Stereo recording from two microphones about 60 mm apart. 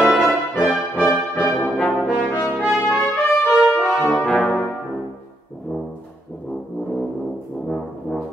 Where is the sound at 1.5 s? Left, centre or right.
Centre.